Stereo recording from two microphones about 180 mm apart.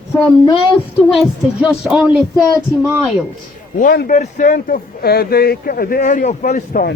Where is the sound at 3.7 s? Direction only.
55° left (ahead or behind).